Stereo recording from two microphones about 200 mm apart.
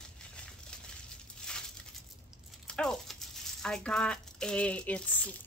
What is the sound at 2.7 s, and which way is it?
Speech, 5° left (ahead or behind).